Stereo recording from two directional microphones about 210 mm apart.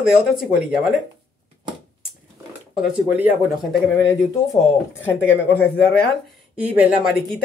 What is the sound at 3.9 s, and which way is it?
Speech, 10° left (ahead or behind).